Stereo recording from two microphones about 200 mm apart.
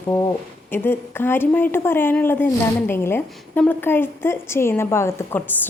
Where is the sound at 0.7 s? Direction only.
10° left (ahead or behind).